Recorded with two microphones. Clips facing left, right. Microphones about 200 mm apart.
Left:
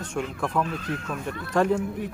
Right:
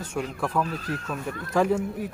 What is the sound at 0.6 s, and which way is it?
Speech, 40° right (ahead or behind).